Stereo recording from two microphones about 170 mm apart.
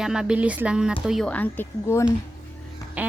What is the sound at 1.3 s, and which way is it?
Speech, 10° left (ahead or behind).